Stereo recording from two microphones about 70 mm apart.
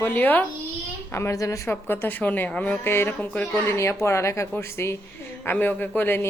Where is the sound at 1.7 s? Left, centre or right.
Left.